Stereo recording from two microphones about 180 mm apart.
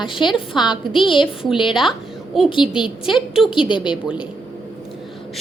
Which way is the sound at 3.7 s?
25° left (ahead or behind).